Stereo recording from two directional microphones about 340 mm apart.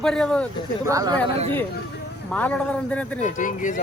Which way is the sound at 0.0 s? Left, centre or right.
Centre.